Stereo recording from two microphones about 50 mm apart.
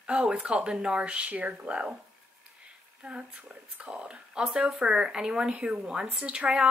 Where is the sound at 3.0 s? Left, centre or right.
Right.